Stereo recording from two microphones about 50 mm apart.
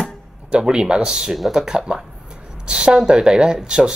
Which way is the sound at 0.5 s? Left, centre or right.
Centre.